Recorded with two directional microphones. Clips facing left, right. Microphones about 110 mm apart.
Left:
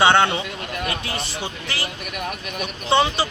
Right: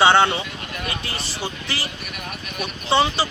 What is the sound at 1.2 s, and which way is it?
Speech, 20° left (ahead or behind).